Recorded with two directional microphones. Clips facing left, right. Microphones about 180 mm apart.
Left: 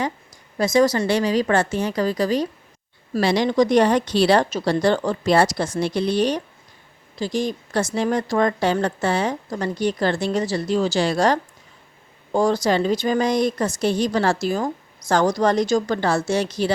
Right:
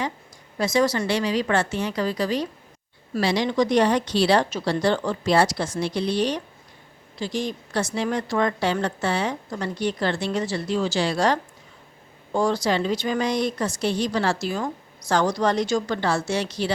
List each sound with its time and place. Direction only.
0.6 s a woman's voice: 45° left (ahead or behind)